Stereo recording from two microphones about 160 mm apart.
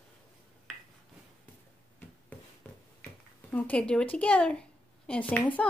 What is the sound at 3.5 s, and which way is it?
A woman's voice, 10° left (ahead or behind).